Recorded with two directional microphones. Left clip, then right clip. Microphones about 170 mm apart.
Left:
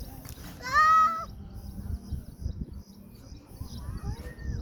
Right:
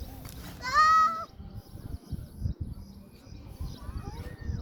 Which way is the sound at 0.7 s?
40° left (ahead or behind).